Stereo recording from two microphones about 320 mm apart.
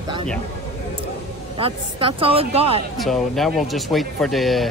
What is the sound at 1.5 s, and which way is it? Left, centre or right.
Speech, centre.